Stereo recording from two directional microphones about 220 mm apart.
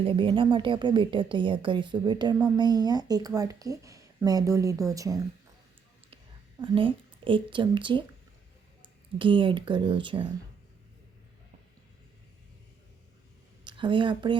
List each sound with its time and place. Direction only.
0.0 s speech: 25° right (ahead or behind)
6.6 s speech: 25° right (ahead or behind)
9.1 s speech: 25° right (ahead or behind)
13.7 s speech: 20° right (ahead or behind)